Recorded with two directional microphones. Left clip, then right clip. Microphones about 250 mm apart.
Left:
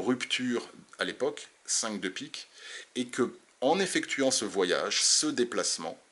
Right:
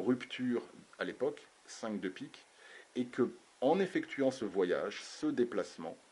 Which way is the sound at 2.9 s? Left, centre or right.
Centre.